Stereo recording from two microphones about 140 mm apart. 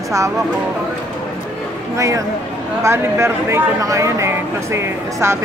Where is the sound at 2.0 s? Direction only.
25° right (ahead or behind).